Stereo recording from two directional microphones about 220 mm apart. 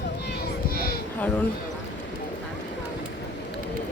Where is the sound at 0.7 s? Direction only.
45° left (ahead or behind).